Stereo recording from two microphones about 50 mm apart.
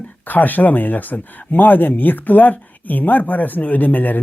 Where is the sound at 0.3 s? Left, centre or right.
Left.